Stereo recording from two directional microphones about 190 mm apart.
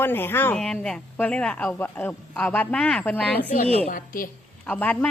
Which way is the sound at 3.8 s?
45° left (ahead or behind).